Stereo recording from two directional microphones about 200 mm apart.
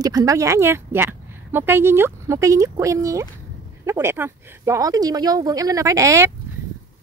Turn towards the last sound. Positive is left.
turn(degrees=-15)  # may be behind; listen again after turning